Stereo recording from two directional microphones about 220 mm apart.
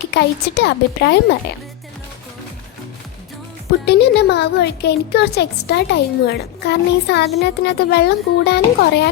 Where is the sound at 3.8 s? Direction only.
50° left (ahead or behind).